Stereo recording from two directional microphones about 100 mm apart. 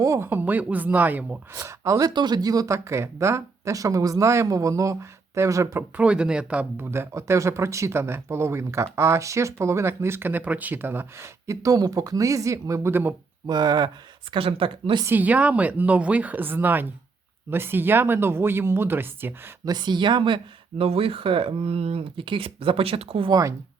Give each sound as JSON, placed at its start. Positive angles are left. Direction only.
{"t": 0.0, "sound": "speech", "side_deg": -30}
{"t": 1.5, "sound": "speech", "side_deg": -30}
{"t": 6.0, "sound": "speech", "side_deg": -10}
{"t": 13.5, "sound": "speech", "side_deg": -45}
{"t": 14.3, "sound": "speech", "side_deg": -65}
{"t": 15.0, "sound": "speech", "side_deg": -20}
{"t": 19.6, "sound": "speech", "side_deg": -45}
{"t": 23.3, "sound": "speech", "side_deg": -35}